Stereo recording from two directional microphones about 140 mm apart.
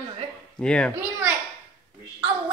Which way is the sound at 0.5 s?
5° left (ahead or behind).